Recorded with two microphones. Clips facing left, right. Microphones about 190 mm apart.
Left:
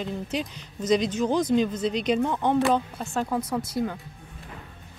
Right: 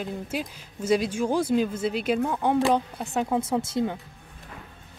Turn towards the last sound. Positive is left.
turn(degrees=-25)  # may be behind; listen again after turning